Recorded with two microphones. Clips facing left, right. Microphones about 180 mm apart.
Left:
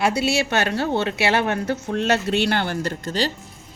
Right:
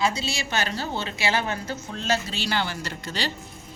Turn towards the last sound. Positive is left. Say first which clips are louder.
# left 7 dB
turn(degrees=45)  # may be behind; listen again after turning